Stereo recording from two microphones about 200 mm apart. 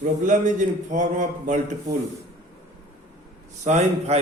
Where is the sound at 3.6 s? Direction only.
35° right (ahead or behind).